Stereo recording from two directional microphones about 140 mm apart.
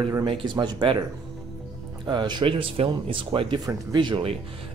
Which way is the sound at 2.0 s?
30° right (ahead or behind).